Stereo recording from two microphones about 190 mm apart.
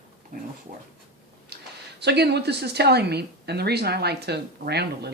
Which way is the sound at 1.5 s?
55° right (ahead or behind).